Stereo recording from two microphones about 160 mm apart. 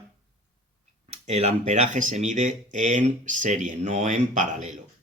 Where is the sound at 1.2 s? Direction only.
45° right (ahead or behind).